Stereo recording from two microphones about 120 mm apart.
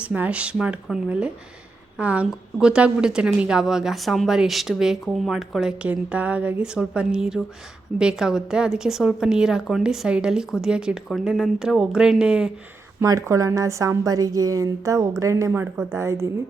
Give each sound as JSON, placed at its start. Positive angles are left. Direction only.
{"t": 0.0, "sound": "a woman's voice", "side_deg": -10}
{"t": 13.0, "sound": "a woman's voice", "side_deg": -25}